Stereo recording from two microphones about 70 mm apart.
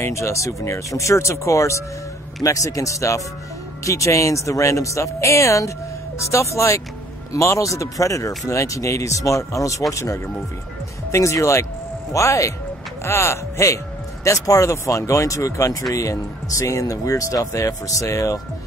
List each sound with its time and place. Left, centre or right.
0.0 s speech: left